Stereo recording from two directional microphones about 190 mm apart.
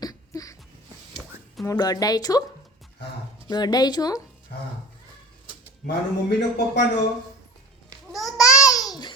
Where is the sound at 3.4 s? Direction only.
20° left (ahead or behind).